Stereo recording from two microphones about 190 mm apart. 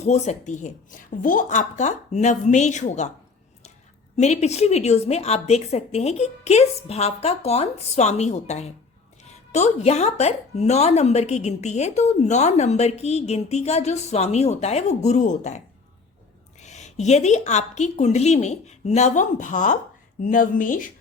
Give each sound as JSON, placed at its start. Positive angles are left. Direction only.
{"t": 0.0, "sound": "a woman's voice", "side_deg": 35}
{"t": 4.2, "sound": "a woman's voice", "side_deg": 35}